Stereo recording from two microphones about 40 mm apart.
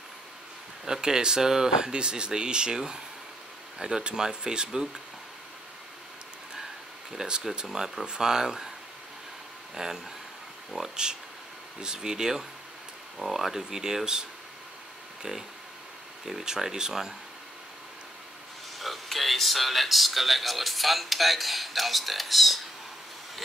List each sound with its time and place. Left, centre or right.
0.8 s speech: centre
7.1 s speech: centre
9.8 s speech: centre
16.3 s speech: centre
18.8 s speech: centre